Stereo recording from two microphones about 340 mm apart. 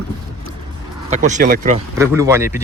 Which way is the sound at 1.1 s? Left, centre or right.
Right.